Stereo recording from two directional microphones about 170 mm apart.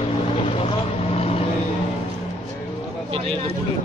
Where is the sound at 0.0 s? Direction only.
35° left (ahead or behind).